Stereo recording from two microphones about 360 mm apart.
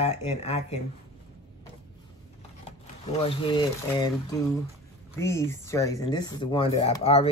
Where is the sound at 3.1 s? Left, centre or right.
Centre.